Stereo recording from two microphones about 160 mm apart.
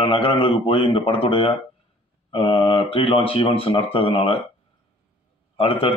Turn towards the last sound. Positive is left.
turn(degrees=35)  # may be behind; listen again after turning